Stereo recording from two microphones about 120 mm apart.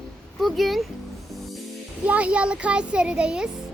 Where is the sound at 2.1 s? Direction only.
10° right (ahead or behind).